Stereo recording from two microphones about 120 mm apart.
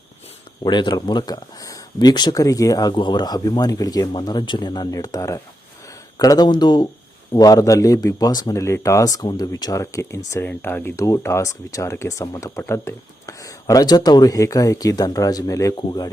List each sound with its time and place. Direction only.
0.6 s speech: 40° left (ahead or behind)